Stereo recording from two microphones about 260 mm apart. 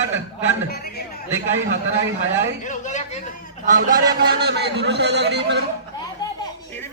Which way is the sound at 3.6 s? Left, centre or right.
Right.